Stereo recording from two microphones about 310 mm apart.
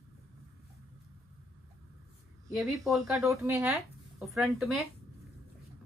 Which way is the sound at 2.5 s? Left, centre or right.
Centre.